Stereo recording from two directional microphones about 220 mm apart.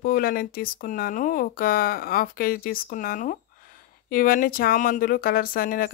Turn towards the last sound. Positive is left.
turn(degrees=40)  # may be behind; listen again after turning